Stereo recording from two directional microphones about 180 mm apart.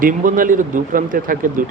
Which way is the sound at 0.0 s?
50° right (ahead or behind).